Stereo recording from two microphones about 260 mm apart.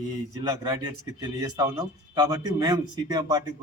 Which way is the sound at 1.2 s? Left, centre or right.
Centre.